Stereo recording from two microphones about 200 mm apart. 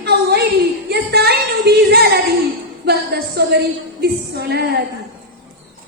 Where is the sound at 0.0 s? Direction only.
55° right (ahead or behind).